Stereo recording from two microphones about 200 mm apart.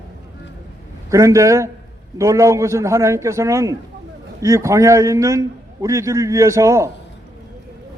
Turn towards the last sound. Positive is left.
turn(degrees=-15)  # may be behind; listen again after turning